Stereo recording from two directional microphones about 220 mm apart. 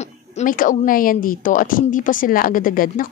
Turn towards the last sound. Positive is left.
turn(degrees=40)  # may be behind; listen again after turning